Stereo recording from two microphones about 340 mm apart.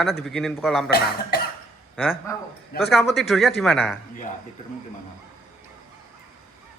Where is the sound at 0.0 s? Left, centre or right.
Centre.